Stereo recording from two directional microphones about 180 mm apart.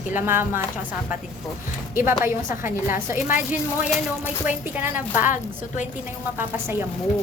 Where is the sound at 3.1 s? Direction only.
10° right (ahead or behind).